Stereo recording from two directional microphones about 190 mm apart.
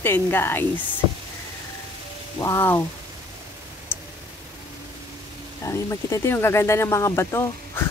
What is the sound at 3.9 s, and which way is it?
Tick, 10° left (ahead or behind).